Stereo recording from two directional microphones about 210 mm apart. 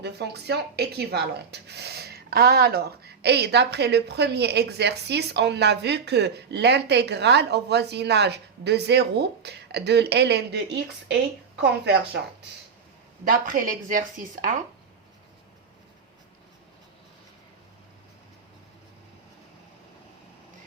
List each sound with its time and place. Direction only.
0.0 s speech: 50° right (ahead or behind)
13.2 s speech: 40° right (ahead or behind)